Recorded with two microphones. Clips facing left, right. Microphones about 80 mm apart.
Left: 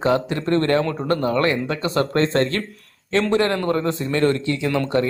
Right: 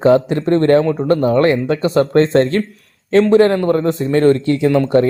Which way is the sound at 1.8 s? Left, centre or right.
Centre.